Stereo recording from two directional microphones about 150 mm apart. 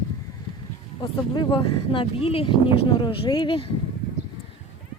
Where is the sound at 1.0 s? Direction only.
30° left (ahead or behind).